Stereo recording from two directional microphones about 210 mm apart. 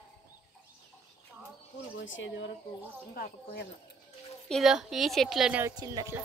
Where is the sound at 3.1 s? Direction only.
45° left (ahead or behind).